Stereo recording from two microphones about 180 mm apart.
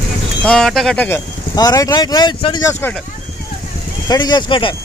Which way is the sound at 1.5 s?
20° left (ahead or behind).